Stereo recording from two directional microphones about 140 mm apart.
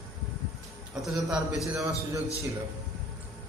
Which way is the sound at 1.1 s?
5° right (ahead or behind).